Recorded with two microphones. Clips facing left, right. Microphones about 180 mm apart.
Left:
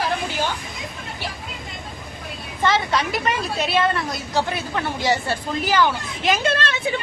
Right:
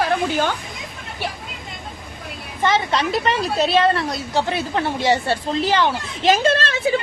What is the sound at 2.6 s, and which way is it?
Speech, 15° right (ahead or behind).